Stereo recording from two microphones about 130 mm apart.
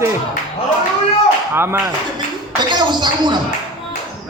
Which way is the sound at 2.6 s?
35° right (ahead or behind).